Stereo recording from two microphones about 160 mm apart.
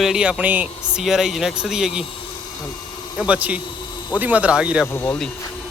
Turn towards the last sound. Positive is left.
turn(degrees=10)  # may be behind; listen again after turning